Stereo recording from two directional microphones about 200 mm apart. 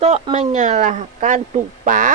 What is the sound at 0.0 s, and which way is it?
A woman's voice, 30° right (ahead or behind).